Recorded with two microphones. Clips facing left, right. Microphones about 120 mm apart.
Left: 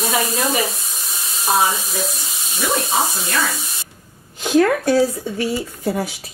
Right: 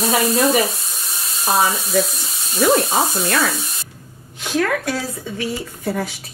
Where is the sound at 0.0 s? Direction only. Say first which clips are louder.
Right 4 dB; centre (ahead or behind).